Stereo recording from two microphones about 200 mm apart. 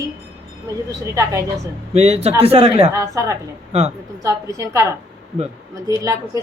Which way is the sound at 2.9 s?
15° right (ahead or behind).